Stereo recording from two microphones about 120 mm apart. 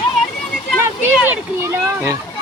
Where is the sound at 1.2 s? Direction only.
15° right (ahead or behind).